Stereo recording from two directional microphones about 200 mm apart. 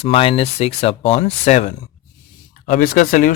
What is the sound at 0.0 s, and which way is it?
Speech, 30° left (ahead or behind).